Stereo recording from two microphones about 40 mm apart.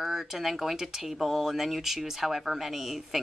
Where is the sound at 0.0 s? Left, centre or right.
Centre.